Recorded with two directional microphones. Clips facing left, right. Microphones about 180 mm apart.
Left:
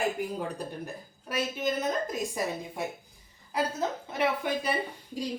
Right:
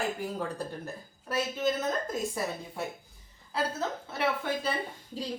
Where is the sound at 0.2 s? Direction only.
15° left (ahead or behind).